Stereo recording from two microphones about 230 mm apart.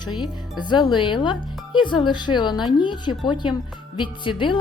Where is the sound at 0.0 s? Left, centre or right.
Centre.